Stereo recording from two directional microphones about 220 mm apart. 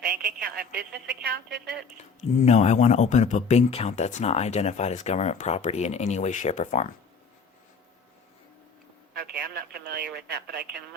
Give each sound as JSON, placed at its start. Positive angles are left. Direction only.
{"t": 0.0, "sound": "a woman's voice", "side_deg": -45}
{"t": 2.4, "sound": "speech", "side_deg": 30}
{"t": 9.1, "sound": "a woman's voice", "side_deg": -45}